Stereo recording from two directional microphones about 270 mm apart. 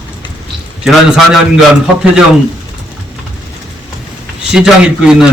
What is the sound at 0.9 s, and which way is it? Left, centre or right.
Speech, centre.